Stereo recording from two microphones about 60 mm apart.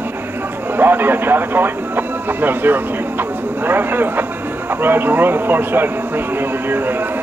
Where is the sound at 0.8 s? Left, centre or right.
Right.